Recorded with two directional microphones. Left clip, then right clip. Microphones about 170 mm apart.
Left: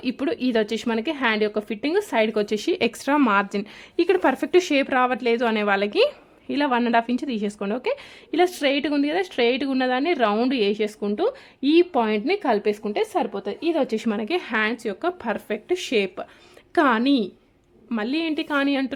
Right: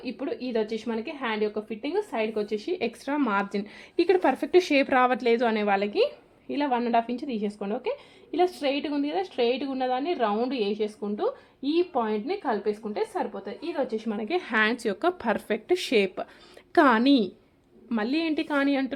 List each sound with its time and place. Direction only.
0.0 s a woman's voice: 70° left (ahead or behind)
3.0 s speech: 35° left (ahead or behind)
3.3 s a woman's voice: 20° left (ahead or behind); by 14.1 s 60° left (ahead or behind)
14.2 s a woman's voice: 20° left (ahead or behind)
14.4 s a woman's voice: 5° left (ahead or behind)